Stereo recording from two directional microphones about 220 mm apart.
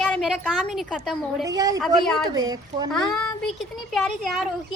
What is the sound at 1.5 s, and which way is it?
Speech, 15° right (ahead or behind).